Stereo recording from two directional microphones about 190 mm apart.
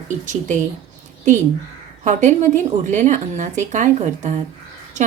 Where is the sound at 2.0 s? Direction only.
40° right (ahead or behind).